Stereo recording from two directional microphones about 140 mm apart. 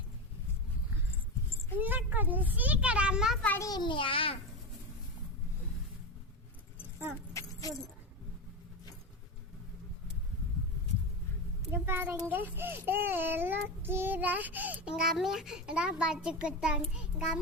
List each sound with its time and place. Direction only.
1.8 s a child's voice: 10° right (ahead or behind)
3.6 s a child's voice: 30° left (ahead or behind)
11.7 s a child's voice: 15° right (ahead or behind)